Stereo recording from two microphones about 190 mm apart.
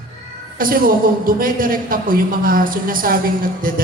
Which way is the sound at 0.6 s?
50° right (ahead or behind).